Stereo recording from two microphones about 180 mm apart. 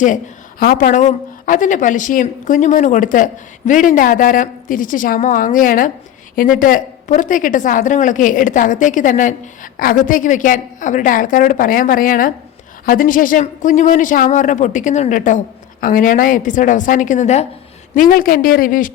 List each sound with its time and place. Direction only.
0.6 s a woman's voice: 50° left (ahead or behind)
17.9 s a woman's voice: 50° left (ahead or behind)